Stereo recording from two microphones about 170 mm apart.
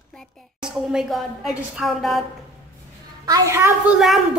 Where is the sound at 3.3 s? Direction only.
20° right (ahead or behind).